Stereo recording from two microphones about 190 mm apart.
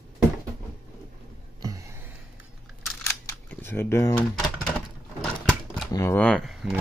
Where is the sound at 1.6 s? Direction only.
20° right (ahead or behind).